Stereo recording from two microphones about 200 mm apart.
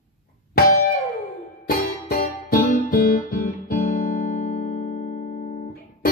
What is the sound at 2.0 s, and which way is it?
Guitar, 45° left (ahead or behind).